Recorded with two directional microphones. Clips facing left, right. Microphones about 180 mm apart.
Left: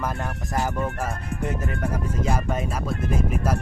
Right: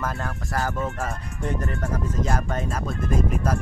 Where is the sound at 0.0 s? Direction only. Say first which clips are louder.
Left 1 dB; 15° left (ahead or behind).